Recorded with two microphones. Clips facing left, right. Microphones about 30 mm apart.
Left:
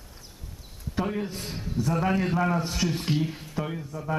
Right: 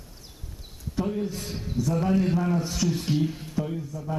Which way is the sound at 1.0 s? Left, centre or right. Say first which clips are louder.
Right 3 dB; left.